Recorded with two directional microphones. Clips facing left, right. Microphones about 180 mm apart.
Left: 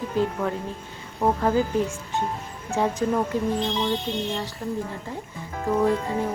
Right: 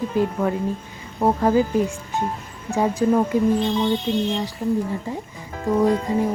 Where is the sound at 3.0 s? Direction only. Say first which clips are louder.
Right 5 dB; 10° right (ahead or behind).